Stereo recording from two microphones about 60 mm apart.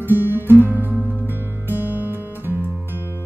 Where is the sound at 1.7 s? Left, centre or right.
Right.